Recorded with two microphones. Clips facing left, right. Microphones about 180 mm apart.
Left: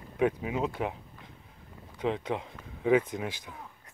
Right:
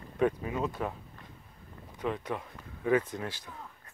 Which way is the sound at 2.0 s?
20° left (ahead or behind).